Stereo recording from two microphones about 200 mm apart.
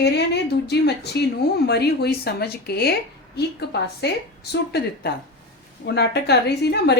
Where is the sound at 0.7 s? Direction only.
55° left (ahead or behind).